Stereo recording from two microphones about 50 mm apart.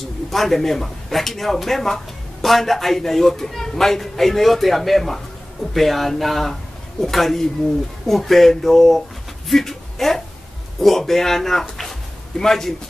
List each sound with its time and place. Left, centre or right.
0.0 s a man's voice: centre